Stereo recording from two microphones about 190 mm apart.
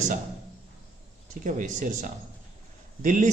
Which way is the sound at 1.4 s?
45° right (ahead or behind).